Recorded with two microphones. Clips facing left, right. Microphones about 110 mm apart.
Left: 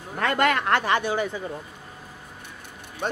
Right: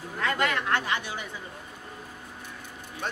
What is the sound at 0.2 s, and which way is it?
Speech, 55° left (ahead or behind).